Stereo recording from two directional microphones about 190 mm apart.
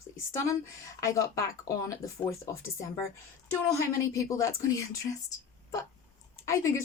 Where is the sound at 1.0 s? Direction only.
15° left (ahead or behind).